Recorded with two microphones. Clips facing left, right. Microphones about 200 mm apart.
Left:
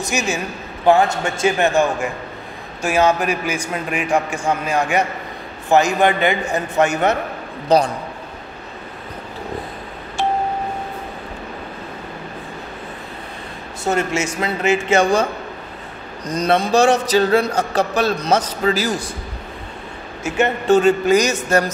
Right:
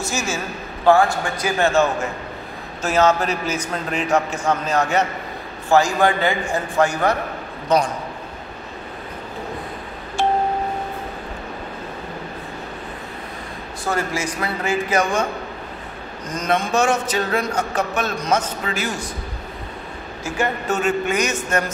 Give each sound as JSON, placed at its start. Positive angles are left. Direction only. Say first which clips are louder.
{"t": 0.0, "sound": "a man's voice", "louder": "left 3 dB", "side_deg": 15}
{"t": 7.7, "sound": "speech", "louder": "left 3 dB", "side_deg": 35}
{"t": 13.8, "sound": "a man's voice", "louder": "left 4 dB", "side_deg": 25}
{"t": 16.3, "sound": "speech", "louder": "left 4 dB", "side_deg": 35}
{"t": 20.2, "sound": "speech", "louder": "left 6 dB", "side_deg": 25}